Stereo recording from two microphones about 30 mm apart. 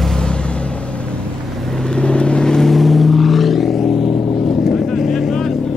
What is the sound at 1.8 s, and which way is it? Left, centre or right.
Vehicle, left.